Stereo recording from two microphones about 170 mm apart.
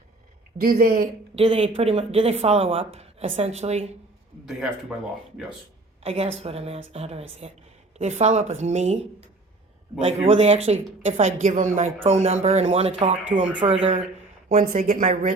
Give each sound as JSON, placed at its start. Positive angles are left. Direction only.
{"t": 0.6, "sound": "speech", "side_deg": -60}
{"t": 1.4, "sound": "speech", "side_deg": -35}
{"t": 4.4, "sound": "a man's voice", "side_deg": 0}
{"t": 6.0, "sound": "speech", "side_deg": -35}
{"t": 14.5, "sound": "a woman's voice", "side_deg": -45}